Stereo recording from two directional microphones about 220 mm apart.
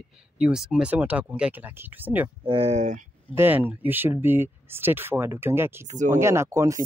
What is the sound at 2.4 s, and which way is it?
Speech, 25° right (ahead or behind).